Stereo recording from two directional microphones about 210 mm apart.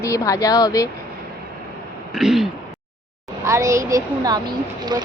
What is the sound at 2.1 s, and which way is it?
Throat clearing, centre (ahead or behind).